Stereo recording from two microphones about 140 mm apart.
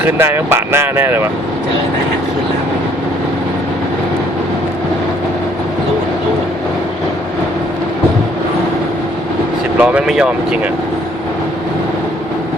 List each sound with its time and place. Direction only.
0.0 s speech: 15° right (ahead or behind)
9.7 s speech: 5° right (ahead or behind)